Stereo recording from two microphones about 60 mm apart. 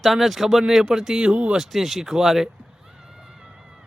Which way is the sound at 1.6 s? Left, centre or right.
Centre.